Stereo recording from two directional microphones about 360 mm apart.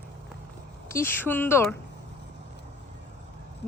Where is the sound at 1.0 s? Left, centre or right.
Centre.